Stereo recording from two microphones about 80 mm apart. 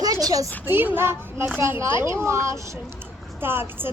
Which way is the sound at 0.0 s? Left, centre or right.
Right.